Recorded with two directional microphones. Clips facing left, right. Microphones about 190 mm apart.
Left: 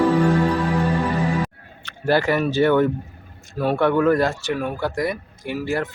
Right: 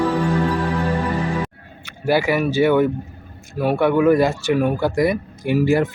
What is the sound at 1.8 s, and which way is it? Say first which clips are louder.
Speech: right 1 dB; 10° right (ahead or behind).